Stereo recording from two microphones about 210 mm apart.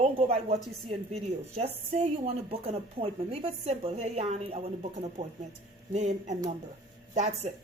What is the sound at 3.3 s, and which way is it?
A woman's voice, 25° right (ahead or behind).